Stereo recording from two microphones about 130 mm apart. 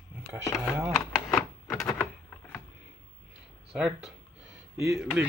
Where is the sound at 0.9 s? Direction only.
5° left (ahead or behind).